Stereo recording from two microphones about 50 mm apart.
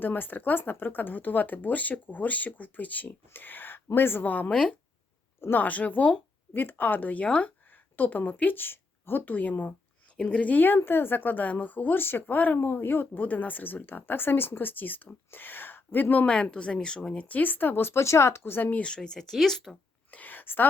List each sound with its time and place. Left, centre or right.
0.0 s speech: left
4.4 s speech: left
5.5 s speech: left
6.5 s speech: left
7.9 s speech: left
10.2 s speech: centre
10.5 s speech: left
12.2 s speech: left
12.5 s speech: left
16.3 s speech: centre
17.2 s speech: left
18.0 s speech: left
18.8 s speech: centre
20.1 s a sound: left